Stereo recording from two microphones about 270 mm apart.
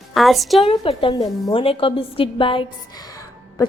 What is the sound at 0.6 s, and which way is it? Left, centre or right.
A woman's voice, centre.